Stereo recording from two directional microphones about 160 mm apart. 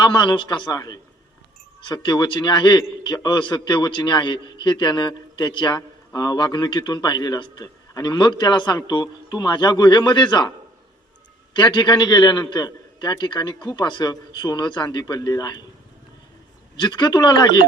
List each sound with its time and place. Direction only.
0.0 s a man's voice: 30° left (ahead or behind)
11.5 s a man's voice: 25° left (ahead or behind)
16.7 s a man's voice: 25° left (ahead or behind)